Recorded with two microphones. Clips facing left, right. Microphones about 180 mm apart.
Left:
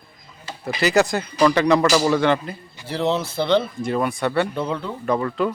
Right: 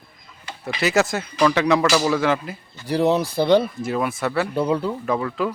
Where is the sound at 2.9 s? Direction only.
15° right (ahead or behind).